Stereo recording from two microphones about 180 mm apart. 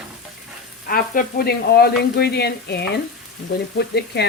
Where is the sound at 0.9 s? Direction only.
55° left (ahead or behind).